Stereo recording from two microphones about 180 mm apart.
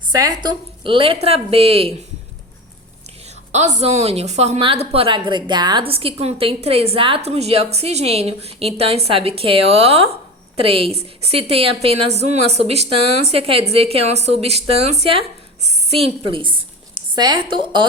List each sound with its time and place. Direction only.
0.1 s a woman's voice: 20° right (ahead or behind)
3.5 s a woman's voice: 40° right (ahead or behind)